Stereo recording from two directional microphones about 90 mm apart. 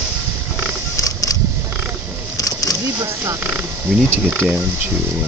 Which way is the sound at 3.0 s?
35° right (ahead or behind).